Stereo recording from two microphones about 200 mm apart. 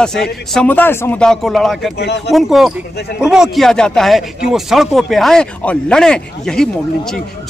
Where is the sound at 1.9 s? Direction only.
60° left (ahead or behind).